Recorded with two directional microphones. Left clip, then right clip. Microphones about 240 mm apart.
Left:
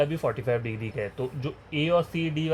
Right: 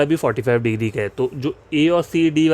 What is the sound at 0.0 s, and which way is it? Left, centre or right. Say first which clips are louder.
Speech: right 8 dB; right.